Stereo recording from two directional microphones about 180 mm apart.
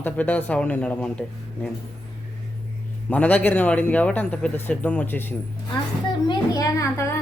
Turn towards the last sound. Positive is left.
turn(degrees=15)  # may be behind; listen again after turning